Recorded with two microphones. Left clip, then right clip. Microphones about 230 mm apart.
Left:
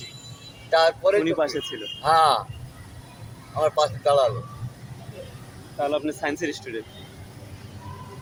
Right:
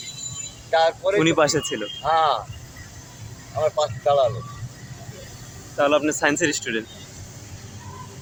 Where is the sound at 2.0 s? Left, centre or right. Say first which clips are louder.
Left 2 dB; centre.